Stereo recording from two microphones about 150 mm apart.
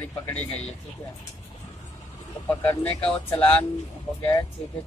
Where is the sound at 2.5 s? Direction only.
10° left (ahead or behind).